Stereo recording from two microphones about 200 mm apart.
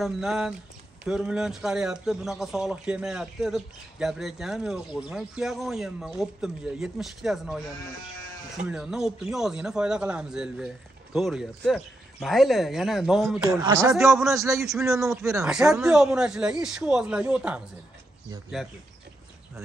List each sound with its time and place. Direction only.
0.0 s a man's voice: centre (ahead or behind)
8.6 s a man's voice: 5° right (ahead or behind)
13.5 s a man's voice: 15° right (ahead or behind)
13.9 s a man's voice: centre (ahead or behind)
14.3 s a man's voice: 15° right (ahead or behind)
15.5 s a man's voice: 5° right (ahead or behind)